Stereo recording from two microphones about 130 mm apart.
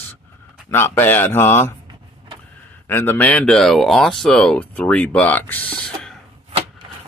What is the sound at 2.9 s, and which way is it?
Speech, 15° left (ahead or behind).